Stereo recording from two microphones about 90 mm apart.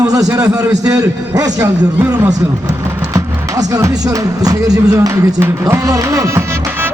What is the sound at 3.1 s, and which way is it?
A man's voice, 40° right (ahead or behind).